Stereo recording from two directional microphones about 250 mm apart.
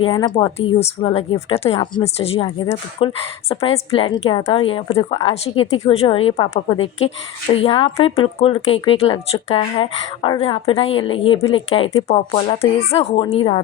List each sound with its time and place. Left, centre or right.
0.0 s speech: centre